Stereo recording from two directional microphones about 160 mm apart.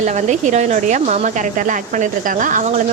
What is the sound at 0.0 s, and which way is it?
A woman's voice, 50° right (ahead or behind).